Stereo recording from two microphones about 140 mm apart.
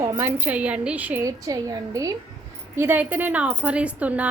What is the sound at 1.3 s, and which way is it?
Speech, 25° right (ahead or behind).